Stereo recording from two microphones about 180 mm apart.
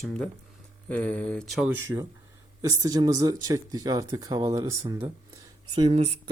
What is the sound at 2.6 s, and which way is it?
Speech, 20° right (ahead or behind).